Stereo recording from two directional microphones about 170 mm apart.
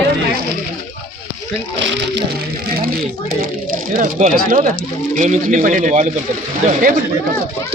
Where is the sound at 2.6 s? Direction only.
60° right (ahead or behind).